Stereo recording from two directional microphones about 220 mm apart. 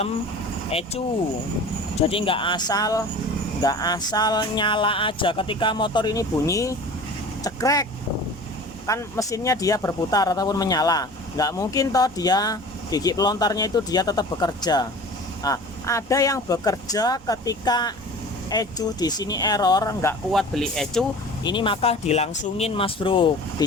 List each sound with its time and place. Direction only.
0.7 s music: 25° left (ahead or behind)
7.4 s speech: 15° left (ahead or behind)
8.9 s speech: 15° left (ahead or behind)
20.3 s speech: centre (ahead or behind)
21.4 s music: 20° left (ahead or behind)